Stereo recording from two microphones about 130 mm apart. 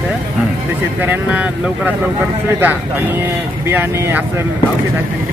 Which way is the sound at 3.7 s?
15° right (ahead or behind).